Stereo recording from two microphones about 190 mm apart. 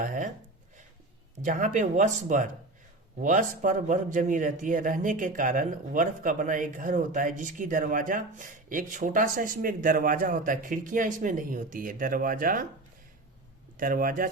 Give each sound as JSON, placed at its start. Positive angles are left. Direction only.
{"t": 0.0, "sound": "a sound", "side_deg": -45}
{"t": 1.5, "sound": "a man's voice", "side_deg": -45}
{"t": 13.7, "sound": "a man's voice", "side_deg": -45}